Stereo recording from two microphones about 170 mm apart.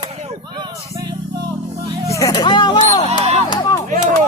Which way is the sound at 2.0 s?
20° left (ahead or behind).